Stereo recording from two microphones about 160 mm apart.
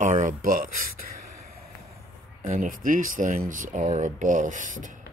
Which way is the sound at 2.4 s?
55° right (ahead or behind).